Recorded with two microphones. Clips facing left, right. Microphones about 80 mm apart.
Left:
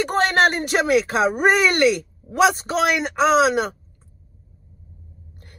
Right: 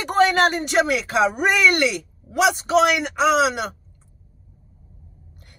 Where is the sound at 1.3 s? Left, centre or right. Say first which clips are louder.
Left 1 dB; left.